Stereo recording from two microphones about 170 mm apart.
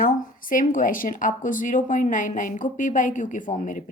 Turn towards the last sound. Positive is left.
turn(degrees=45)  # may be behind; listen again after turning